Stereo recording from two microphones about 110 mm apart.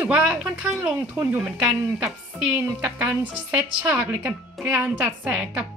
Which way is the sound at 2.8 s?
15° right (ahead or behind).